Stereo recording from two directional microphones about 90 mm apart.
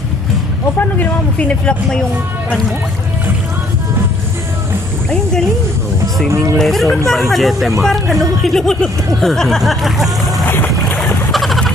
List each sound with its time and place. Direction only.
1.5 s speech: 10° left (ahead or behind)
6.5 s speech: 5° left (ahead or behind)
10.4 s boat: 25° left (ahead or behind)
11.3 s a sound: centre (ahead or behind)